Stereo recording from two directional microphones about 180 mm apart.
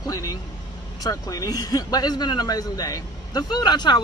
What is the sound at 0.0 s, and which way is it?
A man's voice, 20° left (ahead or behind).